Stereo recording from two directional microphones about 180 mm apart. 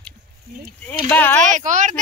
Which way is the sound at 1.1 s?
10° left (ahead or behind).